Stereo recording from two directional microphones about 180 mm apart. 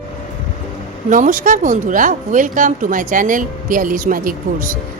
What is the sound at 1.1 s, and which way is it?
Speech, 45° right (ahead or behind).